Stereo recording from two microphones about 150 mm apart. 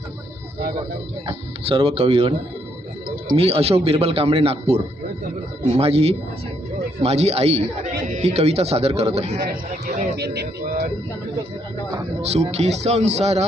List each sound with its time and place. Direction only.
1.3 s speech: 40° right (ahead or behind)
3.3 s speech: 40° right (ahead or behind)
10.2 s speech: 90° right
12.2 s speech: 45° right (ahead or behind)